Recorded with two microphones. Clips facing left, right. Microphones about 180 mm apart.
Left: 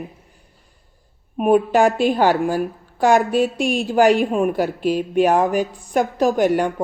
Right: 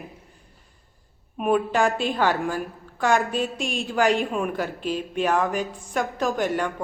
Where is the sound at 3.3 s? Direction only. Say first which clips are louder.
Left 8 dB; 5° left (ahead or behind).